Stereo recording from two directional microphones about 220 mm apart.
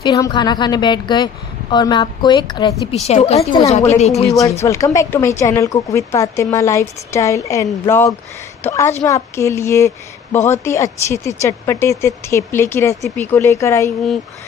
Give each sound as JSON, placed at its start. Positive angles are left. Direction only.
{"t": 0.0, "sound": "a woman's voice", "side_deg": 15}
{"t": 4.6, "sound": "a woman's voice", "side_deg": 15}